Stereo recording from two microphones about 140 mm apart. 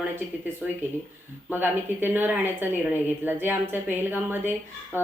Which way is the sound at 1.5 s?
15° right (ahead or behind).